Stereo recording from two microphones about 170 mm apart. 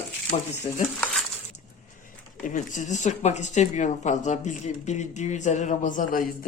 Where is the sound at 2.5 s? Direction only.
45° left (ahead or behind).